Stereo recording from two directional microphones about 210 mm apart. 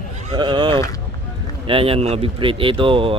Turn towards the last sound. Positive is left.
turn(degrees=-25)  # may be behind; listen again after turning